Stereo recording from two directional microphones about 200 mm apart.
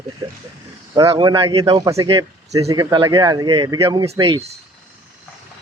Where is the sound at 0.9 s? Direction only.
25° right (ahead or behind).